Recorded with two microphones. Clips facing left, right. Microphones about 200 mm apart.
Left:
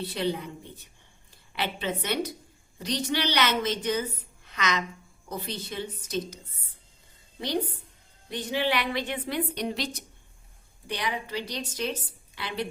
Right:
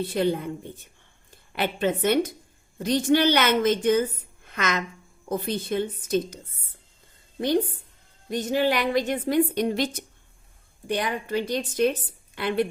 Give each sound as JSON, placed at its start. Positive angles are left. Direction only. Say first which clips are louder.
{"t": 0.0, "sound": "a woman's voice", "louder": "right 5 dB", "side_deg": -50}